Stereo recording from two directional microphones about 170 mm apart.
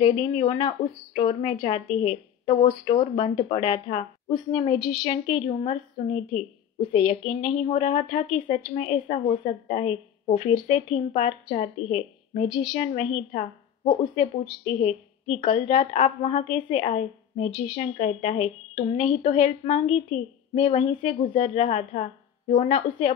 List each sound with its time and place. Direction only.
0.0 s a woman's voice: 30° left (ahead or behind)